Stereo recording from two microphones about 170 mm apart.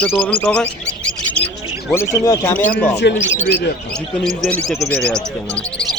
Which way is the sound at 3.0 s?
75° left (ahead or behind).